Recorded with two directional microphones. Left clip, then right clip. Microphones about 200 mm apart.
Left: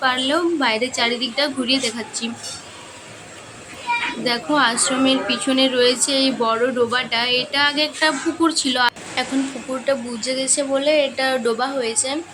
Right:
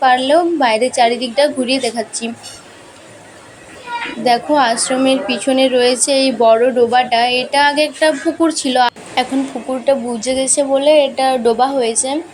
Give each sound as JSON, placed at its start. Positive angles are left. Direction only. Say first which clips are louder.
{"t": 0.0, "sound": "a woman's voice", "louder": "right 7 dB", "side_deg": -15}
{"t": 4.2, "sound": "a woman's voice", "louder": "right 8 dB", "side_deg": -15}